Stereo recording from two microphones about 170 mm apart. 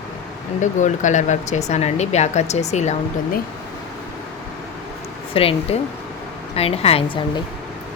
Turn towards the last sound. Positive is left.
turn(degrees=35)  # may be behind; listen again after turning